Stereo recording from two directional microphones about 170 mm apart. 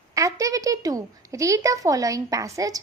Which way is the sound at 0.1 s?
20° right (ahead or behind).